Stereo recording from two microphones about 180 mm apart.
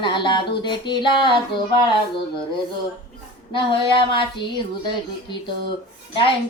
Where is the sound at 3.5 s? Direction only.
30° left (ahead or behind).